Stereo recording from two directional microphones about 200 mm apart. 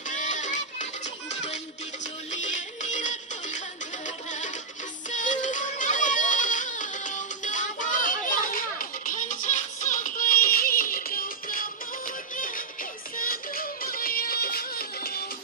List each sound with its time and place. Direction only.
0.1 s music: 40° left (ahead or behind)